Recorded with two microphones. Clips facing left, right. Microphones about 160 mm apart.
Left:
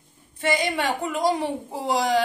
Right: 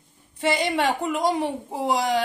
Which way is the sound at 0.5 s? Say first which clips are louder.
Right 1 dB; 25° right (ahead or behind).